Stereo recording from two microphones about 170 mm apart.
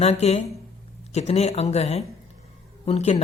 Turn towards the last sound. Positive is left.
turn(degrees=35)  # may be behind; listen again after turning